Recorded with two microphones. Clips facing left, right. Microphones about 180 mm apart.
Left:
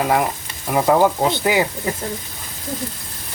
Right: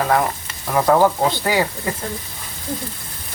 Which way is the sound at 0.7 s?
10° left (ahead or behind).